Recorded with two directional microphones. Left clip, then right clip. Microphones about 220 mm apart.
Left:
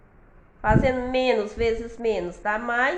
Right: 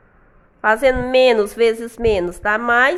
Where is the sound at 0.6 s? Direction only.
50° right (ahead or behind).